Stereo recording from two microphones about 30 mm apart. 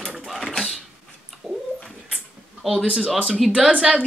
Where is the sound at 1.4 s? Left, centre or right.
Centre.